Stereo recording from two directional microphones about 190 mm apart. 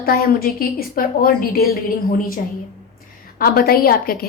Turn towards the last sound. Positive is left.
turn(degrees=50)  # may be behind; listen again after turning